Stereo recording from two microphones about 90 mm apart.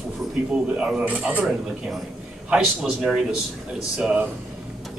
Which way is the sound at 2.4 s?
10° right (ahead or behind).